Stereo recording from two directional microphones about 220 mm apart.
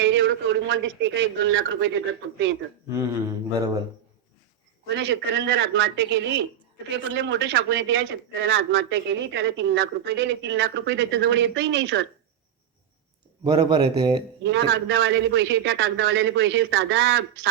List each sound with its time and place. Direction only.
0.0 s a man's voice: 55° right (ahead or behind)
2.9 s speech: 15° right (ahead or behind)
4.9 s a man's voice: 55° right (ahead or behind)
13.4 s speech: 20° right (ahead or behind)
14.4 s a man's voice: 55° right (ahead or behind)